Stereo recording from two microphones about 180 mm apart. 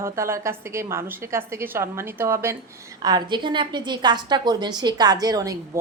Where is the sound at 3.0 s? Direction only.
25° right (ahead or behind).